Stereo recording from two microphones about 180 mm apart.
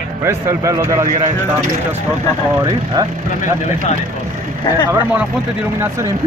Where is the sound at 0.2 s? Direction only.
15° right (ahead or behind).